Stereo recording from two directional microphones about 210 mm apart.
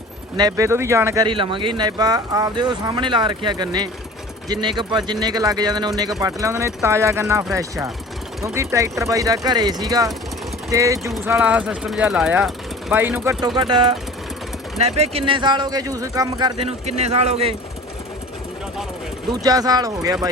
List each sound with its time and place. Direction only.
0.3 s speech: 15° right (ahead or behind)
13.6 s speech: 25° right (ahead or behind)
19.3 s speech: 15° right (ahead or behind)